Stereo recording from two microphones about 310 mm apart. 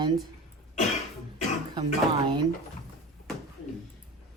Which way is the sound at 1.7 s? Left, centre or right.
Centre.